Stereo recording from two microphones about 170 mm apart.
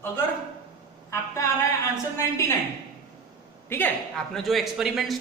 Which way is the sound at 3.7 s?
10° left (ahead or behind).